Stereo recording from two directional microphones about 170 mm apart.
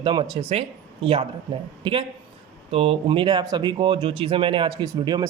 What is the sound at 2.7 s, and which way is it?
Speech, 35° right (ahead or behind).